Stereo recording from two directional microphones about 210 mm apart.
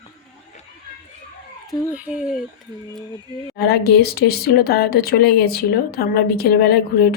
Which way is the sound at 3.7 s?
50° left (ahead or behind).